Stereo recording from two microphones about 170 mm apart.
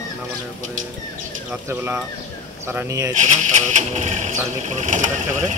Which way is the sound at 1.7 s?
15° right (ahead or behind).